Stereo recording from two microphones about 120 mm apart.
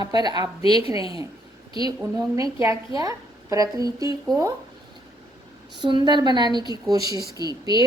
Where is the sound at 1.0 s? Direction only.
45° left (ahead or behind).